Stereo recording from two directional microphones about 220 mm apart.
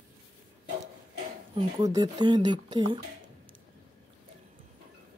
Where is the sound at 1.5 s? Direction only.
20° right (ahead or behind).